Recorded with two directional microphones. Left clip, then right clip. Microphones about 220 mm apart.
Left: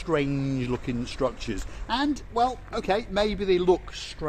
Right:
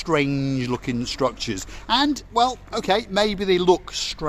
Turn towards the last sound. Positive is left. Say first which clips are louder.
# right 5 dB
turn(degrees=-40)  # may be behind; listen again after turning